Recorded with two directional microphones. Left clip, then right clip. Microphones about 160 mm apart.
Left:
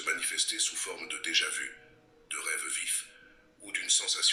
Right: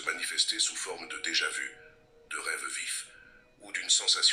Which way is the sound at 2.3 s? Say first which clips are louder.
Right 1 dB; 25° right (ahead or behind).